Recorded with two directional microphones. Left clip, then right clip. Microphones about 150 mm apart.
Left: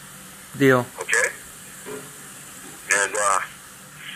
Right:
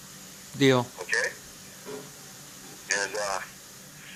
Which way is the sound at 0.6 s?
20° right (ahead or behind).